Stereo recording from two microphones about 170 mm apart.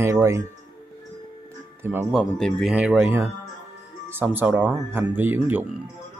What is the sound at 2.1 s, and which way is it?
Speech, centre (ahead or behind).